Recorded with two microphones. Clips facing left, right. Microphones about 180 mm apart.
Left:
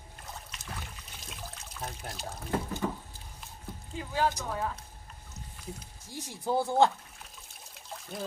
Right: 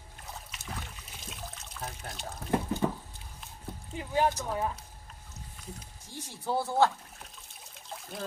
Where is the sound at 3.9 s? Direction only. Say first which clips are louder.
Right 2 dB; 20° right (ahead or behind).